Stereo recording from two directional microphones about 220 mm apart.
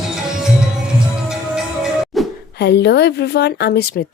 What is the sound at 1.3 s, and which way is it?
Music, centre (ahead or behind).